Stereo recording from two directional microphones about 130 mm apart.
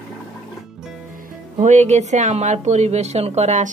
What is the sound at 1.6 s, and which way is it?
A woman's voice, 65° right (ahead or behind).